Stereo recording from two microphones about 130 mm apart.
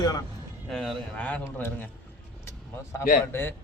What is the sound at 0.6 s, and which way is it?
A man's voice, centre (ahead or behind).